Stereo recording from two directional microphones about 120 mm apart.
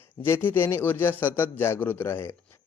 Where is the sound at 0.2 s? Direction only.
15° left (ahead or behind).